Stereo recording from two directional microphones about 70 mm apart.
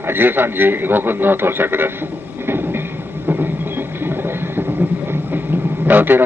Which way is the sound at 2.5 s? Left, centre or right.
Right.